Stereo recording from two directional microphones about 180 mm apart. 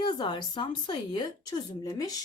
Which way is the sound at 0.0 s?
25° left (ahead or behind).